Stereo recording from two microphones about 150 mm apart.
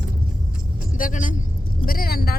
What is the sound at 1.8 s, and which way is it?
Vehicle, 75° left (ahead or behind).